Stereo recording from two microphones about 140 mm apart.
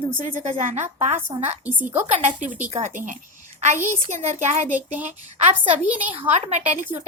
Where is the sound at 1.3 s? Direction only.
45° right (ahead or behind).